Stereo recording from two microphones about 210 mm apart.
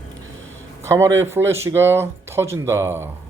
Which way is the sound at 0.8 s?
15° right (ahead or behind).